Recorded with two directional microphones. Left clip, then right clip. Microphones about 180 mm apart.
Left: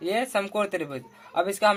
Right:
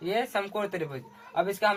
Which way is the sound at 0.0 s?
50° left (ahead or behind).